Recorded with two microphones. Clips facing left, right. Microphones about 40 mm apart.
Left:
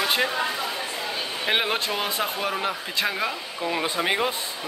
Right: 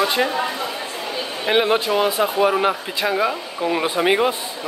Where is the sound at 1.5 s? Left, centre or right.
Centre.